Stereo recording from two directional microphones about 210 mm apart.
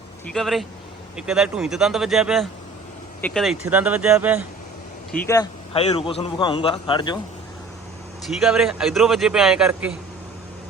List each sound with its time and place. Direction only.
0.3 s speech: centre (ahead or behind)
3.7 s speech: 5° right (ahead or behind)
5.2 s speech: 15° left (ahead or behind)
5.7 s a man's voice: 30° left (ahead or behind)
8.3 s speech: centre (ahead or behind)